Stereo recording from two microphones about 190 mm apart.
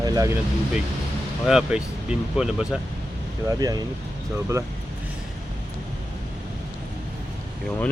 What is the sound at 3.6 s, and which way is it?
Speech, 20° right (ahead or behind).